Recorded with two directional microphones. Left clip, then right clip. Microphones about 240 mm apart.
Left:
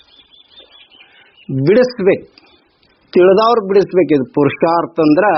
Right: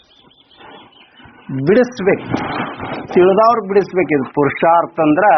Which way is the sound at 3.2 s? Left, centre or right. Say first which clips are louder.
Left 1 dB; left.